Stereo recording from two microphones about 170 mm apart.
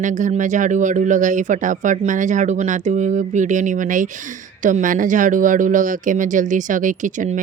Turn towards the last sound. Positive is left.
turn(degrees=-50)  # may be behind; listen again after turning